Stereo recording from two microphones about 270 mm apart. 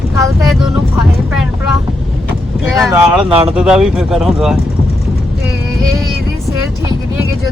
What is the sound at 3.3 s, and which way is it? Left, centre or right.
Speech, right.